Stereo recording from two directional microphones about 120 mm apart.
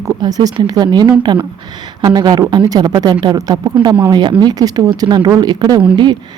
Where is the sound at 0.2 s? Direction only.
30° right (ahead or behind).